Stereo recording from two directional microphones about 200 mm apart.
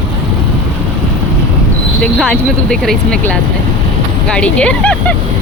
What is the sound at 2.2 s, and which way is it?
Speech, 5° left (ahead or behind).